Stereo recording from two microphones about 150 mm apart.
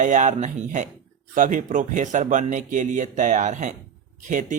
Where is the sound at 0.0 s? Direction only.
55° right (ahead or behind).